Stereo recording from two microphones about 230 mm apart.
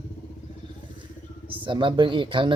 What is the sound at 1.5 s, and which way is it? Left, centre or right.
Speech, right.